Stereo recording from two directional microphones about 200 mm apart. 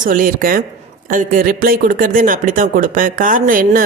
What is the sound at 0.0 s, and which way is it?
Speech, 45° right (ahead or behind).